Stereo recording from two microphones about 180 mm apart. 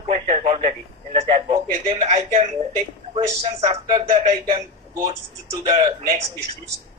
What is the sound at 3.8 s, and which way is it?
Speech, 25° right (ahead or behind).